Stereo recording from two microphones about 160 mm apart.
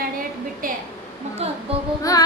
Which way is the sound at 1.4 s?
40° right (ahead or behind).